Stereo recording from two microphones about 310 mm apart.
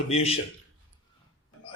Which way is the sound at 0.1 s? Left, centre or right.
Centre.